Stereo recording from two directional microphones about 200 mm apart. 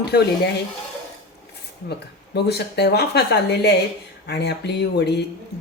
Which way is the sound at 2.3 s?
55° left (ahead or behind).